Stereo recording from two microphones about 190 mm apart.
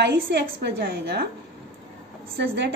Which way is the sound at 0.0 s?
65° right (ahead or behind).